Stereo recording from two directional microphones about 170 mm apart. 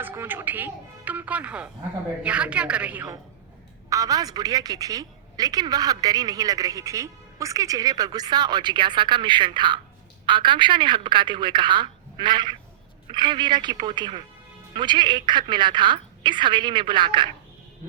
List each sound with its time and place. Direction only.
0.0 s speech: 10° right (ahead or behind)
3.8 s a woman's voice: 20° right (ahead or behind)